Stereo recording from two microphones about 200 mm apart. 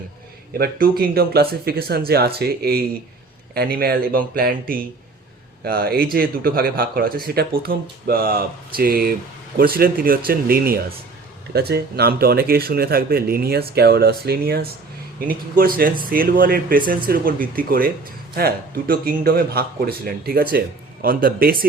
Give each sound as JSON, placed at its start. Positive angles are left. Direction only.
{"t": 0.6, "sound": "speech", "side_deg": -50}